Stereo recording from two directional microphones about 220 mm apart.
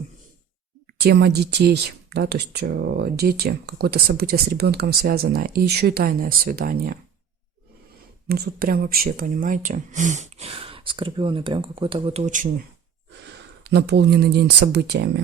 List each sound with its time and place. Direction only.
0.9 s speech: 45° right (ahead or behind)
8.3 s speech: 45° right (ahead or behind)
13.7 s speech: 50° right (ahead or behind)